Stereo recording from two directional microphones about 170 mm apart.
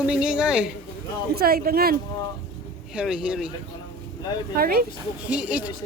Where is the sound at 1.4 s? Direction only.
65° right (ahead or behind).